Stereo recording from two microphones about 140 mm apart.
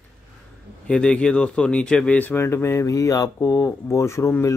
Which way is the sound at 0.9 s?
10° left (ahead or behind).